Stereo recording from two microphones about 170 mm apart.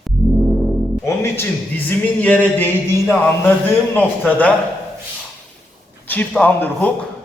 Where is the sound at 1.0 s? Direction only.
15° left (ahead or behind).